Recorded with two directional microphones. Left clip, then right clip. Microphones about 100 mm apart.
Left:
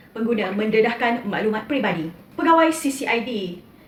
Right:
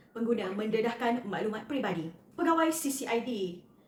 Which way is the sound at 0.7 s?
35° right (ahead or behind).